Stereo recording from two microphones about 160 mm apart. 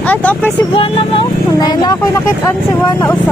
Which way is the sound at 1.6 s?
25° left (ahead or behind).